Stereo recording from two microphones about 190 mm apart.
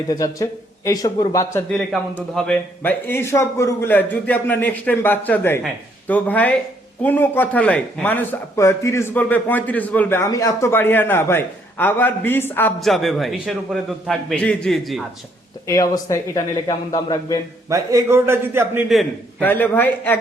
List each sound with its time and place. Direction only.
0.1 s a man's voice: 20° left (ahead or behind)
1.7 s a man's voice: centre (ahead or behind)
15.6 s a man's voice: 15° left (ahead or behind)
17.7 s a man's voice: 15° right (ahead or behind)
19.4 s a man's voice: 10° left (ahead or behind)